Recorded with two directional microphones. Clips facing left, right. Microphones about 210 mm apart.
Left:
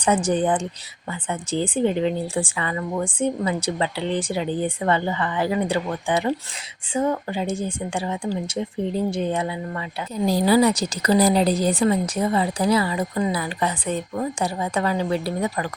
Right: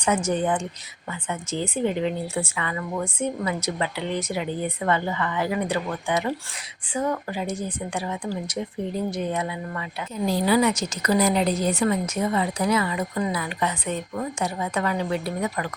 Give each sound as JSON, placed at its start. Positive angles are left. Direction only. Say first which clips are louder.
{"t": 0.0, "sound": "a woman's voice", "louder": "left 3 dB", "side_deg": 30}